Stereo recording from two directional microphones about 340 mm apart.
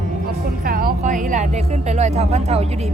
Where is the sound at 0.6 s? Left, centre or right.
Right.